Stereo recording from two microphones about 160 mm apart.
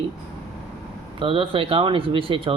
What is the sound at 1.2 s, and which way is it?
Speech, 35° right (ahead or behind).